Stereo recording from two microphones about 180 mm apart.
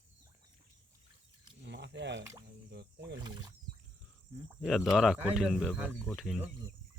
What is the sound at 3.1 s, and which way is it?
Speech, 25° right (ahead or behind).